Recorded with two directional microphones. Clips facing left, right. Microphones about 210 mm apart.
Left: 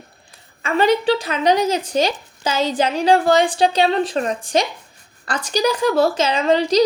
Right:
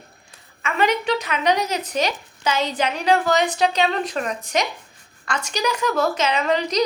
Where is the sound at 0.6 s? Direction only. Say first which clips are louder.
Left 5 dB; 30° left (ahead or behind).